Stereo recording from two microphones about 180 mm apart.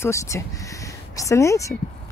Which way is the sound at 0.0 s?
15° left (ahead or behind).